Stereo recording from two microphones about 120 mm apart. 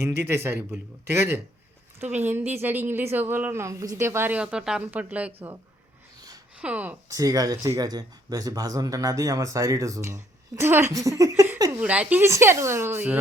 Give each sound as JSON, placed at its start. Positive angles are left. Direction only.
{"t": 0.0, "sound": "speech", "side_deg": -20}
{"t": 6.6, "sound": "speech", "side_deg": -10}
{"t": 7.1, "sound": "speech", "side_deg": -30}
{"t": 10.9, "sound": "a sound", "side_deg": -25}
{"t": 11.8, "sound": "speech", "side_deg": -10}
{"t": 12.3, "sound": "speech", "side_deg": -25}